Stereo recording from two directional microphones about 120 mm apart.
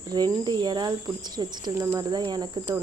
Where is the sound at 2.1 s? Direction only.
35° right (ahead or behind).